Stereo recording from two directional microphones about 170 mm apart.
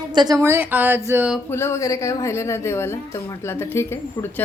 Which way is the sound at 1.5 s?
15° left (ahead or behind).